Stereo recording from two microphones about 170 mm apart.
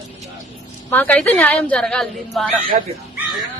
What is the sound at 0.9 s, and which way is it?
A woman's voice, 10° left (ahead or behind).